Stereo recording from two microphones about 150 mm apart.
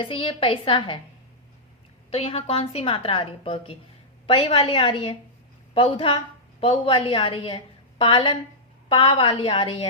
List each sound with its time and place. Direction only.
0.0 s a woman's voice: 35° left (ahead or behind)
2.0 s a woman's voice: 40° left (ahead or behind)